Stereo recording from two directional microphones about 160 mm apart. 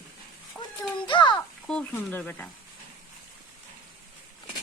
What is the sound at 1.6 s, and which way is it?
Speech, 10° left (ahead or behind).